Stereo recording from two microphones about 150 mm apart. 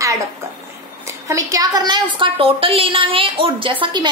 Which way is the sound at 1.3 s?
20° right (ahead or behind).